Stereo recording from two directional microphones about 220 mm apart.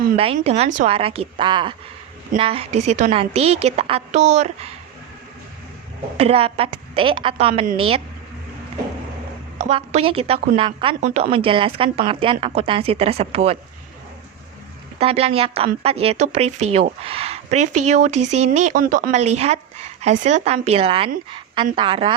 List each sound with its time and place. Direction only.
0.3 s a woman's voice: 30° right (ahead or behind)
6.1 s a woman's voice: 25° right (ahead or behind)
9.6 s a woman's voice: 30° right (ahead or behind)
14.9 s a woman's voice: 25° right (ahead or behind)
18.2 s speech: 90° right
18.4 s a woman's voice: 30° right (ahead or behind)